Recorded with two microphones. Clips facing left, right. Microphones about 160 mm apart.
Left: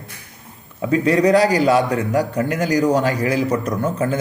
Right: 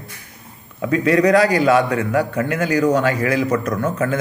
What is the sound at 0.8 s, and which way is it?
A man's voice, 25° left (ahead or behind).